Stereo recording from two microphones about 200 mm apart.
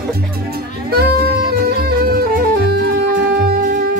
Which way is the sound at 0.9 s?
50° right (ahead or behind).